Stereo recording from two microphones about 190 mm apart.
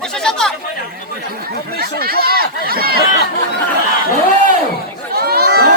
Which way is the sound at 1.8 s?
55° right (ahead or behind).